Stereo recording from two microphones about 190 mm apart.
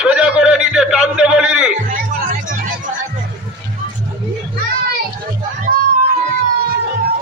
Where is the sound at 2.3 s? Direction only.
45° right (ahead or behind).